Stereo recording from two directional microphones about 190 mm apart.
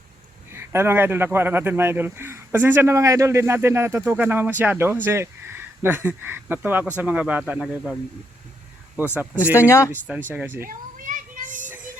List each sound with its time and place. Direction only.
0.5 s speech: 15° right (ahead or behind)
9.0 s speech: 10° right (ahead or behind)
9.6 s speech: 15° left (ahead or behind)
9.9 s speech: 10° right (ahead or behind)
10.7 s children playing: 45° right (ahead or behind)